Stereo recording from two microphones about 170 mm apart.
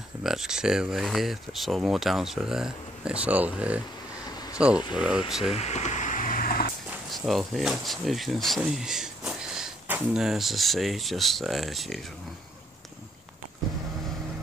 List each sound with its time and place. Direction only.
0.2 s speech: centre (ahead or behind)
5.6 s vehicle: 40° left (ahead or behind); by 6.7 s 60° left (ahead or behind)
7.1 s speech: centre (ahead or behind)